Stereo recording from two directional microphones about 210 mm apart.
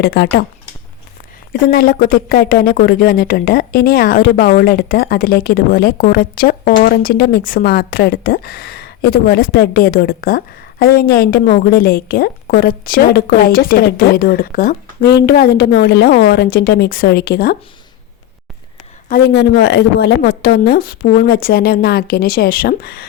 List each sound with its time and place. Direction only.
0.0 s speech: 50° left (ahead or behind)
1.7 s speech: 45° left (ahead or behind)
19.0 s speech: 45° left (ahead or behind)